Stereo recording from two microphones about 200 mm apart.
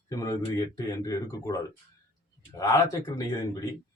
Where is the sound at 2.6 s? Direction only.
15° left (ahead or behind).